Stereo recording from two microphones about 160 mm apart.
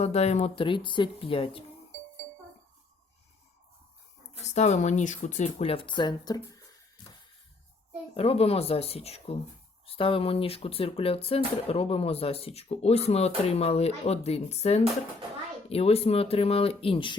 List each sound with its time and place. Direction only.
0.0 s speech: 40° left (ahead or behind)
4.5 s speech: 45° left (ahead or behind); by 6.6 s 25° left (ahead or behind)
8.1 s speech: 40° left (ahead or behind)